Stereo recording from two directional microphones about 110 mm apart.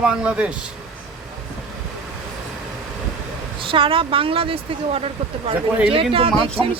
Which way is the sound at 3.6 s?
55° right (ahead or behind).